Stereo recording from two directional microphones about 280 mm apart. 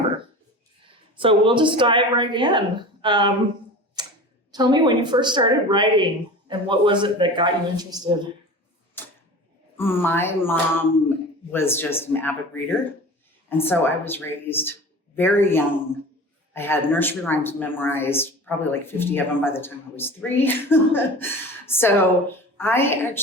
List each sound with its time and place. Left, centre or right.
1.1 s a woman's voice: centre
4.0 s typewriter: centre
4.5 s a woman's voice: centre
9.7 s speech: centre